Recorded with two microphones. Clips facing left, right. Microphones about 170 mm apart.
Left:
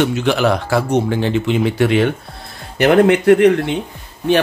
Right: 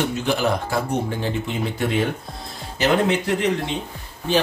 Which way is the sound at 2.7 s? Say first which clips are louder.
Left 8 dB; 60° left (ahead or behind).